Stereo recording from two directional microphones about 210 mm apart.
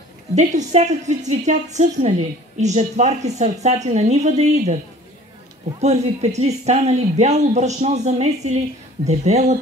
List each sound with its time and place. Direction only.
0.4 s speech: 35° right (ahead or behind)
5.8 s speech: 30° right (ahead or behind)